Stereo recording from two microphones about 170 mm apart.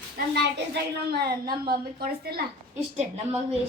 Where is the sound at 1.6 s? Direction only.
65° right (ahead or behind).